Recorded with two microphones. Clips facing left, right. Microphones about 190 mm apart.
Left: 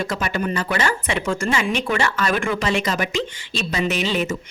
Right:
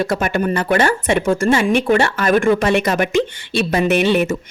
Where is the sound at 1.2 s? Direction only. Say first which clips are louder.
Right 6 dB; 35° right (ahead or behind); by 4.3 s 60° right (ahead or behind).